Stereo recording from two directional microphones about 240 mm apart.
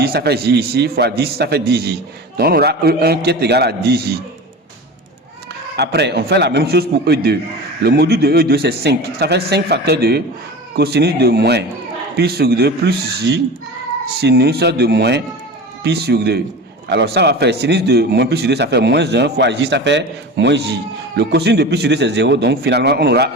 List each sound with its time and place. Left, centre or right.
0.0 s a man's voice: right
5.7 s a man's voice: right